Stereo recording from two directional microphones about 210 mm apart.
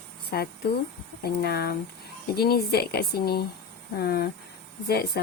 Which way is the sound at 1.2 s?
50° left (ahead or behind).